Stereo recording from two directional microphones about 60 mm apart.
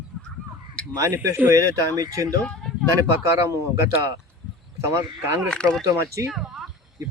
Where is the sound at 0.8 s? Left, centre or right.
Centre.